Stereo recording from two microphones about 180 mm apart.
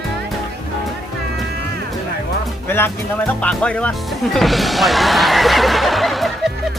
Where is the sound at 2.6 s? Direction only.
10° left (ahead or behind).